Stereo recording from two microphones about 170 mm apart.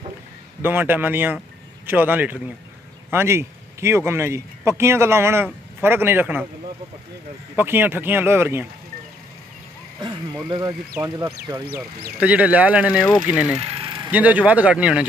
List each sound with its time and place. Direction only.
0.6 s speech: 10° right (ahead or behind)
7.5 s speech: 10° right (ahead or behind)
11.0 s speech: 20° right (ahead or behind)
12.2 s speech: 10° right (ahead or behind)
13.6 s a sound: 30° right (ahead or behind)
14.1 s speech: 10° right (ahead or behind)